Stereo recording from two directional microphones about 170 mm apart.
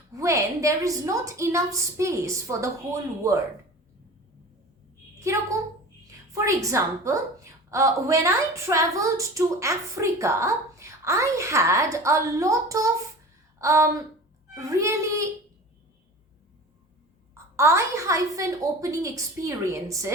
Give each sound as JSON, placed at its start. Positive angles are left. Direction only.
{"t": 0.1, "sound": "a woman's voice", "side_deg": -15}
{"t": 5.2, "sound": "a woman's voice", "side_deg": -15}
{"t": 13.6, "sound": "a sound", "side_deg": -20}
{"t": 14.5, "sound": "a woman's voice", "side_deg": -20}
{"t": 17.3, "sound": "a woman's voice", "side_deg": -15}